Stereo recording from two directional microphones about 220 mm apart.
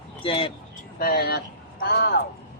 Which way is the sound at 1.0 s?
45° left (ahead or behind).